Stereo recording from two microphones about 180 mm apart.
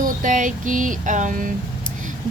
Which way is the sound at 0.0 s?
45° right (ahead or behind).